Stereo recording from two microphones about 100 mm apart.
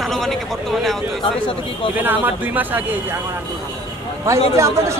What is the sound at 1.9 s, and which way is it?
Speech, 20° right (ahead or behind).